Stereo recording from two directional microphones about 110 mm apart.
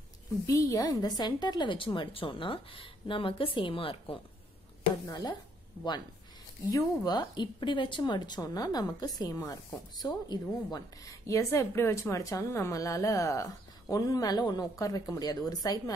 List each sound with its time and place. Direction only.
0.5 s a woman's voice: 30° left (ahead or behind); by 4.2 s 55° left (ahead or behind)
5.0 s a woman's voice: 35° left (ahead or behind)
6.7 s a woman's voice: 40° left (ahead or behind)